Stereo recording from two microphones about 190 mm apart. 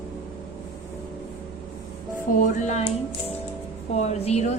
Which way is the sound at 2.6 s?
35° left (ahead or behind).